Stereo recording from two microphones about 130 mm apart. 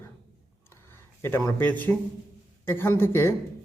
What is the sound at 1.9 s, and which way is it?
A man's voice, 15° left (ahead or behind).